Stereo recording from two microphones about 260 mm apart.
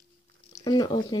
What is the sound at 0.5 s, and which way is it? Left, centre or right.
Speech, centre.